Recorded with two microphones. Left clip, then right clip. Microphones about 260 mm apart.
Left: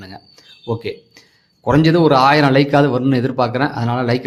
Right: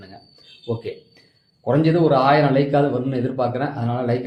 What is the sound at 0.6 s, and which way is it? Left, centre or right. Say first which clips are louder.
A man's voice: left 4 dB; left.